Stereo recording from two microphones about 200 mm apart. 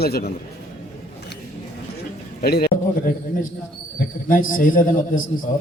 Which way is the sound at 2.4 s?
50° left (ahead or behind).